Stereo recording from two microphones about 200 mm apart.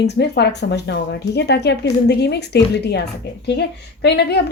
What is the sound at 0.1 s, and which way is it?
Speech, 55° left (ahead or behind).